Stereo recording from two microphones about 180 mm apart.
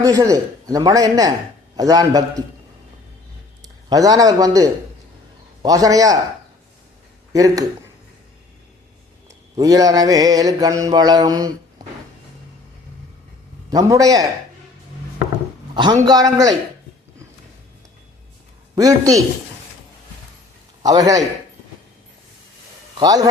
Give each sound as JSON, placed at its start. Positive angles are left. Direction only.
{"t": 0.0, "sound": "mantra", "side_deg": -20}
{"t": 3.8, "sound": "mantra", "side_deg": -20}
{"t": 7.3, "sound": "mantra", "side_deg": -20}
{"t": 9.6, "sound": "mantra", "side_deg": -20}
{"t": 13.7, "sound": "mantra", "side_deg": -20}
{"t": 15.7, "sound": "mantra", "side_deg": -25}
{"t": 18.8, "sound": "mantra", "side_deg": -20}
{"t": 20.8, "sound": "mantra", "side_deg": -20}
{"t": 23.0, "sound": "mantra", "side_deg": -20}